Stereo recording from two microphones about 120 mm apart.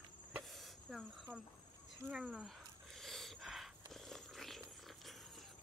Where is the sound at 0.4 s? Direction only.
Centre (ahead or behind).